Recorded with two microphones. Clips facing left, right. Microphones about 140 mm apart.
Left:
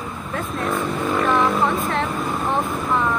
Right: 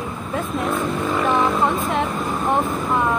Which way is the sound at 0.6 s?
5° right (ahead or behind).